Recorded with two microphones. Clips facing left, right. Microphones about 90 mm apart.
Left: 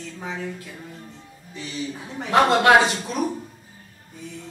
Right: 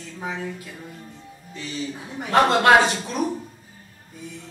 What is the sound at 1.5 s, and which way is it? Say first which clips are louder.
A man's voice: even; 5° left (ahead or behind).